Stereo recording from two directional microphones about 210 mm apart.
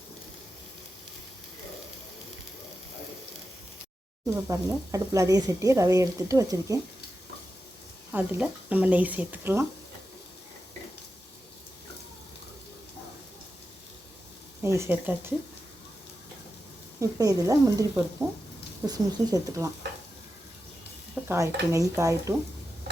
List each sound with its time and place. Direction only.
4.4 s speech: 15° right (ahead or behind)
8.1 s speech: 10° right (ahead or behind)
14.8 s speech: 10° right (ahead or behind)
17.0 s speech: 15° right (ahead or behind)
21.2 s speech: 15° right (ahead or behind)